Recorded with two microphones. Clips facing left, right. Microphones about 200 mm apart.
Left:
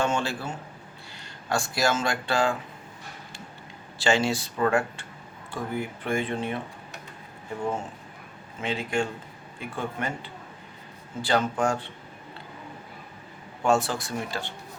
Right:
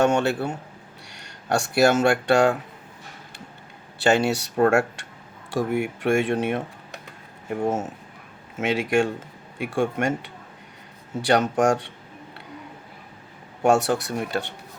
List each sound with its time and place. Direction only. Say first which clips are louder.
0.0 s speech: right 7 dB; 65° right (ahead or behind)
4.0 s speech: right 4 dB; 60° right (ahead or behind)
4.7 s speech: right 4 dB; 85° right
7.5 s speech: right 5 dB; 50° right (ahead or behind)
8.5 s speech: right 6 dB; 85° right
11.3 s speech: right 5 dB; 80° right
13.7 s speech: right 4 dB; 70° right (ahead or behind)